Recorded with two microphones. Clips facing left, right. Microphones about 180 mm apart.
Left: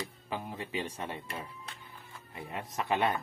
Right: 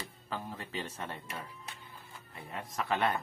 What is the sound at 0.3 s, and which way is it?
Speech, 15° left (ahead or behind).